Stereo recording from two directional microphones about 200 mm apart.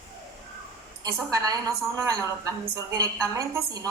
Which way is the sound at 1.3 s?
15° right (ahead or behind).